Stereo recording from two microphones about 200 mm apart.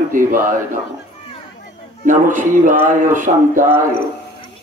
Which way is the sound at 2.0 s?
40° right (ahead or behind).